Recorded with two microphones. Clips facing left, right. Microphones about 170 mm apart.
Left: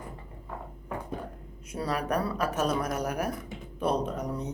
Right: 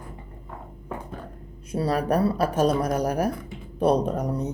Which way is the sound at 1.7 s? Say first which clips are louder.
Right 6 dB; 30° right (ahead or behind).